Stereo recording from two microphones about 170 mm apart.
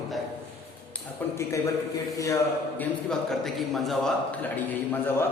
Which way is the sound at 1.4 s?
15° left (ahead or behind).